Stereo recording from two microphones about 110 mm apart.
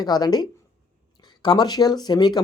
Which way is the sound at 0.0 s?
35° left (ahead or behind).